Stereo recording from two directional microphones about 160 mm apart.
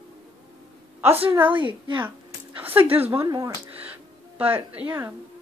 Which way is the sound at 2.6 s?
10° right (ahead or behind).